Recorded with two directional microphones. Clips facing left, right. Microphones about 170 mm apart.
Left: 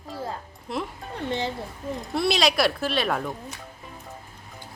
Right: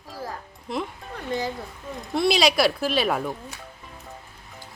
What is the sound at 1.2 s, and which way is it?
Speech, 25° left (ahead or behind).